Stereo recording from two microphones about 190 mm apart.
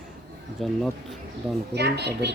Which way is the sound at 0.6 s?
Centre (ahead or behind).